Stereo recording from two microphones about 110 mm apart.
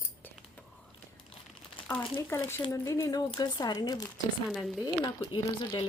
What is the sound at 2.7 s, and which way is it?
Speech, 30° left (ahead or behind).